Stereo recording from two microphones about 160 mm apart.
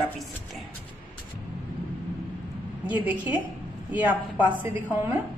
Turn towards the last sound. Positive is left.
turn(degrees=-10)  # may be behind; listen again after turning